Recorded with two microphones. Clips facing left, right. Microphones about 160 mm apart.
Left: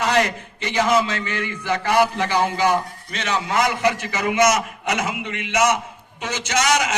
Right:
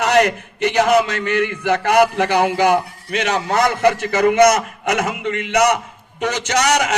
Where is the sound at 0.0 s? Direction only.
65° right (ahead or behind).